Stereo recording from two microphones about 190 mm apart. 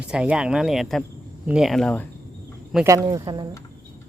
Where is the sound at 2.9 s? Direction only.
15° right (ahead or behind).